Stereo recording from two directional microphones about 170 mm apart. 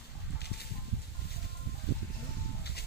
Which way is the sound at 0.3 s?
70° left (ahead or behind).